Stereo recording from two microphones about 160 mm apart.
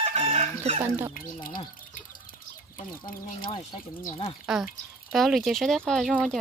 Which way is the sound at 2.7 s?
60° left (ahead or behind).